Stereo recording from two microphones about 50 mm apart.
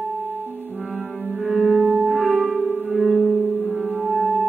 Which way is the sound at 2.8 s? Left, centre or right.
Centre.